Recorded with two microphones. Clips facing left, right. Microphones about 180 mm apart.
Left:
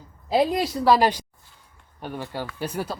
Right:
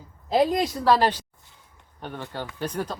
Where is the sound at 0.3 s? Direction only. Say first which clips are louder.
Even; 5° left (ahead or behind).